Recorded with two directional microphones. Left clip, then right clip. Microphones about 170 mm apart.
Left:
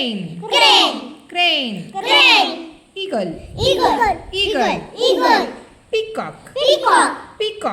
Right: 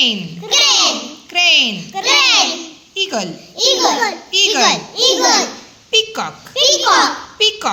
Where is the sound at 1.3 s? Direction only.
Centre (ahead or behind).